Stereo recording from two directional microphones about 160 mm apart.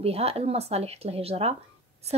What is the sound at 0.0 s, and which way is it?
Speech, 40° right (ahead or behind).